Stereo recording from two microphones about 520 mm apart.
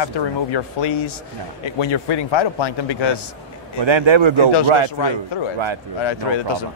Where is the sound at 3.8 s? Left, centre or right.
Right.